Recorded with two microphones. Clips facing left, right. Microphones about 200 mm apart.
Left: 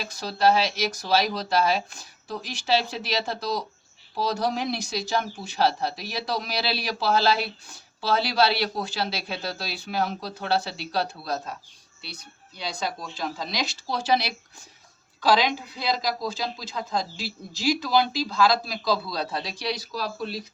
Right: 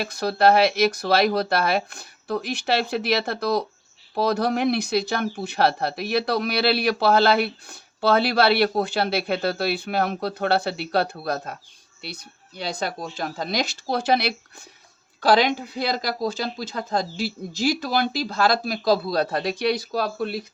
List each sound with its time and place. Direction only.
0.0 s speech: 60° right (ahead or behind)
12.5 s speech: 55° right (ahead or behind)